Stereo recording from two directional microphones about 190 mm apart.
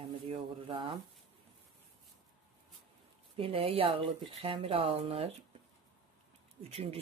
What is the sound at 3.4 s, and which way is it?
Speech, 30° right (ahead or behind).